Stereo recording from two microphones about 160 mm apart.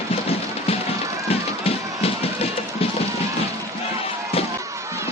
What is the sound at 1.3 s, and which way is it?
Run, 35° left (ahead or behind).